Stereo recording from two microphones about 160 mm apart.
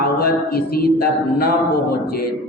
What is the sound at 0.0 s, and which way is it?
Mantra, 70° left (ahead or behind).